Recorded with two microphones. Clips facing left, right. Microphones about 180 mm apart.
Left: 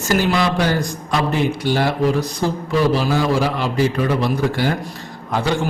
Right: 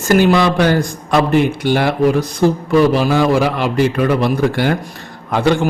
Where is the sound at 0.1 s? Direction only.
55° right (ahead or behind).